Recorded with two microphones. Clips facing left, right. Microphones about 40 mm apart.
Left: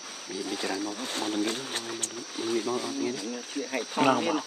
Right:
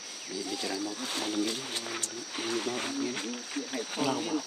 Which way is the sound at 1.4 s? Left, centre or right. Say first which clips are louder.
Left 2 dB; left.